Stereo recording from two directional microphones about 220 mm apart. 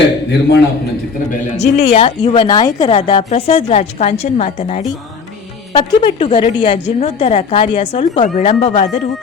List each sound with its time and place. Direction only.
1.5 s speech: 30° left (ahead or behind)